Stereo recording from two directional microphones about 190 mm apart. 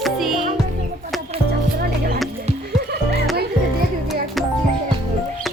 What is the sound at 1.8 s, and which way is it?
Music, 55° right (ahead or behind).